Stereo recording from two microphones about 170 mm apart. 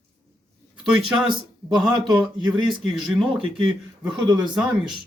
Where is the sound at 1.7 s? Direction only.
25° right (ahead or behind).